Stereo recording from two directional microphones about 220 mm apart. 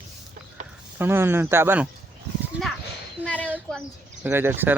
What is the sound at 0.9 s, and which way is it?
Speech, 10° right (ahead or behind).